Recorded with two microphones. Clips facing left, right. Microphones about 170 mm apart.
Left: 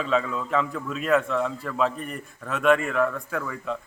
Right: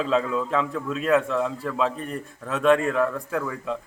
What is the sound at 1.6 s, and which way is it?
A man's voice, 25° right (ahead or behind).